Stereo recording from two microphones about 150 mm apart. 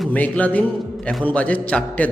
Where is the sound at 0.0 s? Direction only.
10° left (ahead or behind).